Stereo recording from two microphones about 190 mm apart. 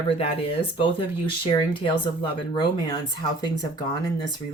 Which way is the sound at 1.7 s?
25° left (ahead or behind).